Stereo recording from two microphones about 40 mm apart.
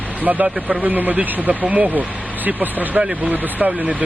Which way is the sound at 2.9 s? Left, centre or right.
Right.